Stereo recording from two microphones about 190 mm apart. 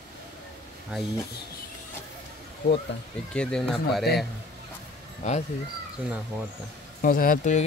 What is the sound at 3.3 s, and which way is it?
Speech, 5° left (ahead or behind).